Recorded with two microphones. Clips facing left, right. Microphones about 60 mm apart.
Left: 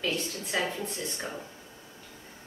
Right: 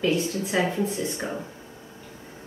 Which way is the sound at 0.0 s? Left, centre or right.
Centre.